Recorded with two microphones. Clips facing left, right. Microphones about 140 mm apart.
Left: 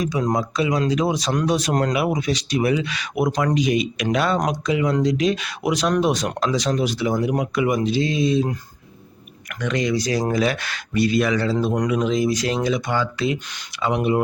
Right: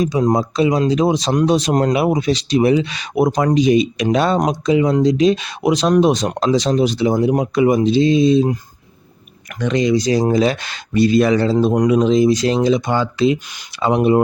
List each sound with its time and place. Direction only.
0.0 s speech: 30° right (ahead or behind)
9.6 s speech: 25° right (ahead or behind)